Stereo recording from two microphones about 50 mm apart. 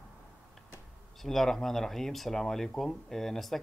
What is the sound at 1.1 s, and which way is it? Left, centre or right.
A man's voice, centre.